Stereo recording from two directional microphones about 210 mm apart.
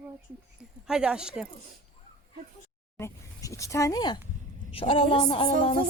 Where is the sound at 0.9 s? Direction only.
5° right (ahead or behind).